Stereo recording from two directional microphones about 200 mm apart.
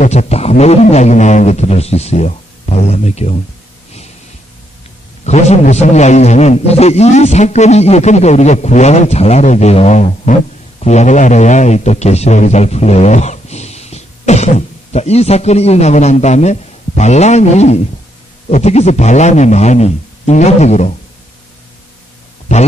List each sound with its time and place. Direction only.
0.0 s a man's voice: 35° left (ahead or behind)
5.2 s a man's voice: 35° left (ahead or behind)